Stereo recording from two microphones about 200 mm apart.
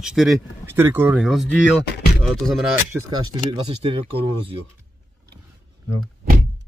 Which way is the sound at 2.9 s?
15° right (ahead or behind).